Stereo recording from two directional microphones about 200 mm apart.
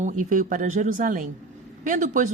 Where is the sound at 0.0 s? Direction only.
40° right (ahead or behind).